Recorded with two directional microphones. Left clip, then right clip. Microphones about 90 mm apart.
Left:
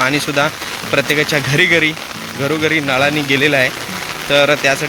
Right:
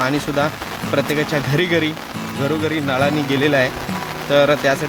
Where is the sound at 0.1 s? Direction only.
15° right (ahead or behind).